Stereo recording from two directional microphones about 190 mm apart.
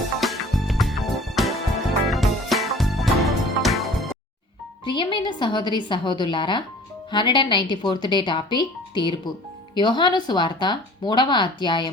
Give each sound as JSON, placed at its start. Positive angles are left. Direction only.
{"t": 0.2, "sound": "music", "side_deg": 0}
{"t": 4.9, "sound": "speech", "side_deg": 25}